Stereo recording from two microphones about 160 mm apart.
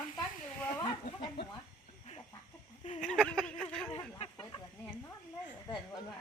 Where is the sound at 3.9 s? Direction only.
35° left (ahead or behind).